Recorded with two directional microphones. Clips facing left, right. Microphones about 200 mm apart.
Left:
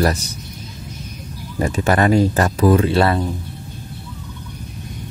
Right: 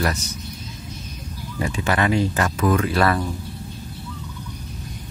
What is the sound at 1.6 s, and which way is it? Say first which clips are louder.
Speech: left 5 dB; 40° left (ahead or behind).